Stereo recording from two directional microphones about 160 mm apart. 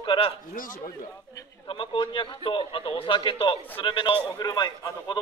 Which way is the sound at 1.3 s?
30° left (ahead or behind).